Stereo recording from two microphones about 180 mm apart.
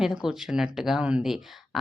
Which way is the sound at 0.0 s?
5° right (ahead or behind).